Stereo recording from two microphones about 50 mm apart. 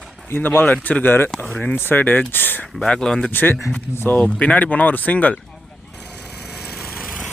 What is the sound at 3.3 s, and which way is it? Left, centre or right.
Speech, left.